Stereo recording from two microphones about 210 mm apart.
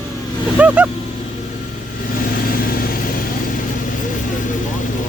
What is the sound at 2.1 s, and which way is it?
Vehicle, 40° left (ahead or behind).